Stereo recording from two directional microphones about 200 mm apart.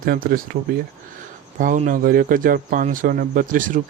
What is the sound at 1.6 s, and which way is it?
Speech, 40° right (ahead or behind).